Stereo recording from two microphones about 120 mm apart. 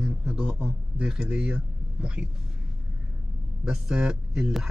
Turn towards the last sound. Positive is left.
turn(degrees=-5)  # may be behind; listen again after turning